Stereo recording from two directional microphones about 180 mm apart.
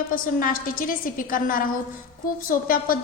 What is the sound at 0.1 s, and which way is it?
A woman's voice, 50° left (ahead or behind).